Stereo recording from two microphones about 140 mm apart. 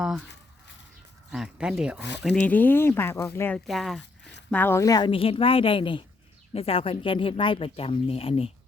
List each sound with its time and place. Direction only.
1.3 s speech: 5° right (ahead or behind)
2.3 s speech: 10° left (ahead or behind)
3.7 s speech: centre (ahead or behind)
4.5 s speech: 15° left (ahead or behind); by 8.5 s 45° left (ahead or behind)